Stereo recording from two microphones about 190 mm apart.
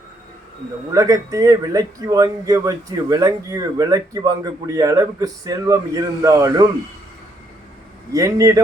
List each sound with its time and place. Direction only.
0.9 s speech: 15° right (ahead or behind)
8.1 s speech: 15° right (ahead or behind)